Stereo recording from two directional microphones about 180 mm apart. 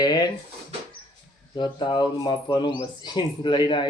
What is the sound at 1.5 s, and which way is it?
Speech, 25° left (ahead or behind).